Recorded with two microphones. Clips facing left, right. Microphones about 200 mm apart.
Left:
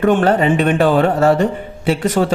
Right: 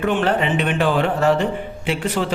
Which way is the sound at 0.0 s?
45° left (ahead or behind).